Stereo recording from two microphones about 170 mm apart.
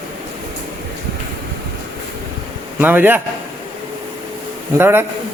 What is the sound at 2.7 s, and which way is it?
Speech, 10° right (ahead or behind).